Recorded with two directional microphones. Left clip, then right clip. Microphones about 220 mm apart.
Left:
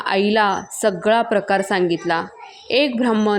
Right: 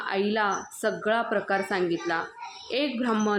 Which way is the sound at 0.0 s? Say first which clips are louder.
Left 9 dB; 35° left (ahead or behind).